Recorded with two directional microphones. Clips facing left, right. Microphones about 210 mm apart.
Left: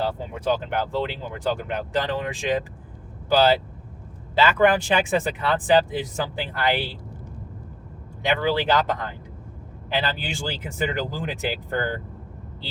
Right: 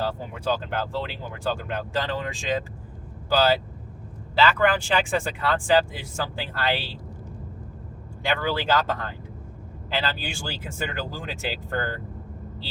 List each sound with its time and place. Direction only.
0.0 s speech: 20° left (ahead or behind)
8.2 s speech: 20° left (ahead or behind)